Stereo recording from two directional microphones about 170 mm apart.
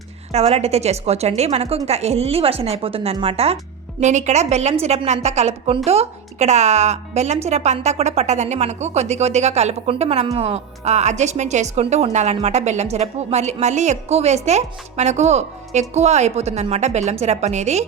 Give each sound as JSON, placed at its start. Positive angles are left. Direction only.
{"t": 0.3, "sound": "speech", "side_deg": -40}